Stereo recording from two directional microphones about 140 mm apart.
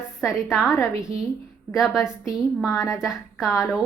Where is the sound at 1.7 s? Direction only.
Centre (ahead or behind).